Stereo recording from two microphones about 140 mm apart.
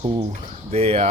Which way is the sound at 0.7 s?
45° right (ahead or behind).